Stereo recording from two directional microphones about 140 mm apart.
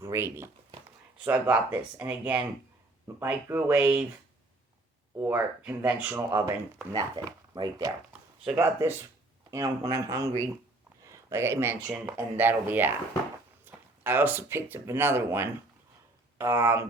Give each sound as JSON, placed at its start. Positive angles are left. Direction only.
{"t": 0.0, "sound": "speech", "side_deg": -20}
{"t": 5.2, "sound": "speech", "side_deg": -10}
{"t": 6.1, "sound": "speech", "side_deg": -20}